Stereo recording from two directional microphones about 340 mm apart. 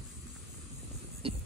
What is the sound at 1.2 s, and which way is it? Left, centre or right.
Music, centre.